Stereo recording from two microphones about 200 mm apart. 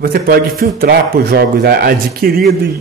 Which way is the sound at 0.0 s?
50° right (ahead or behind).